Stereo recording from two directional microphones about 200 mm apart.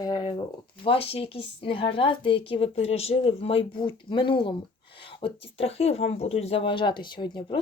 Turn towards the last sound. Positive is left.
turn(degrees=25)  # may be behind; listen again after turning